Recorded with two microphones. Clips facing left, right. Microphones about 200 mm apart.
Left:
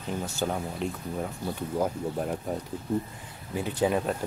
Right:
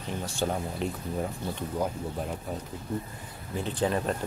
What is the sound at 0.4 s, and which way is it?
Speech, centre (ahead or behind).